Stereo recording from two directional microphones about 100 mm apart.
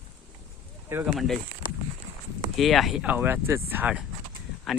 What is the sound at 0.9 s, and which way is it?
Speech, 20° right (ahead or behind).